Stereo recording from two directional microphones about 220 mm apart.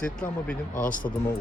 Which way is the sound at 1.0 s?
20° left (ahead or behind).